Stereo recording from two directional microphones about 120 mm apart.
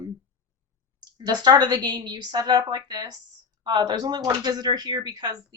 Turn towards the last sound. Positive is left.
turn(degrees=-35)  # may be behind; listen again after turning